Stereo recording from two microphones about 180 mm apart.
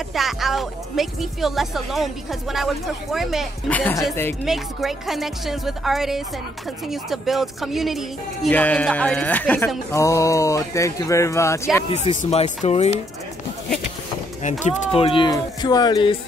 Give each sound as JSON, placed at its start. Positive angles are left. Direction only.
{"t": 0.1, "sound": "speech", "side_deg": 0}
{"t": 4.5, "sound": "speech", "side_deg": 0}
{"t": 8.5, "sound": "speech", "side_deg": 10}
{"t": 12.2, "sound": "speech", "side_deg": 35}
{"t": 14.6, "sound": "speech", "side_deg": 35}